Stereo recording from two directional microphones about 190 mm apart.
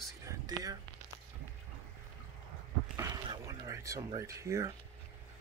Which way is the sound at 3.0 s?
20° right (ahead or behind).